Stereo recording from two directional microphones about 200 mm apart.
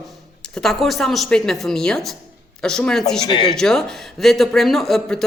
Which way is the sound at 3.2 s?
25° left (ahead or behind).